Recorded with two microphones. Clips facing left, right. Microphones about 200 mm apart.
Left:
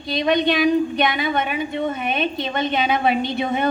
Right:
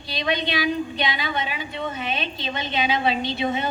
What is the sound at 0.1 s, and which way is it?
A woman's voice, 50° left (ahead or behind).